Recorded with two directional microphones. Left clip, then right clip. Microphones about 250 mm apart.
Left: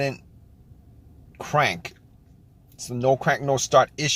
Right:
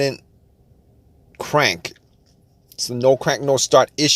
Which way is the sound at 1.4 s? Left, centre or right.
Right.